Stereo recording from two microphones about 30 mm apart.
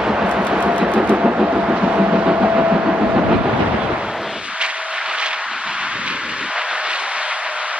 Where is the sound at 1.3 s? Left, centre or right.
Right.